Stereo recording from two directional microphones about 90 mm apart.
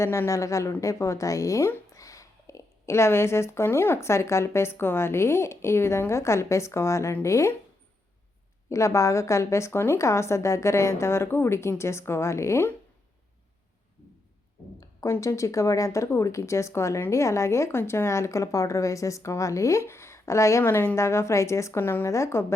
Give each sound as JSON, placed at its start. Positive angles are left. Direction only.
{"t": 0.0, "sound": "speech", "side_deg": 30}
{"t": 8.7, "sound": "a woman's voice", "side_deg": 35}
{"t": 15.1, "sound": "speech", "side_deg": 35}